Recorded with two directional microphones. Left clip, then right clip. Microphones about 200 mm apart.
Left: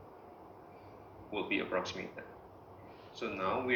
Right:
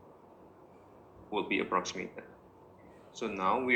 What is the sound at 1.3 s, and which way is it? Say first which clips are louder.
Speech: right 3 dB; 60° right (ahead or behind).